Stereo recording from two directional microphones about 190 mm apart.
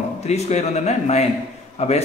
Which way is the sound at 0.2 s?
35° left (ahead or behind).